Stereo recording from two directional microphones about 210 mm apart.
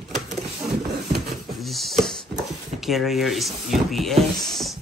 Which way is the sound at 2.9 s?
Centre (ahead or behind).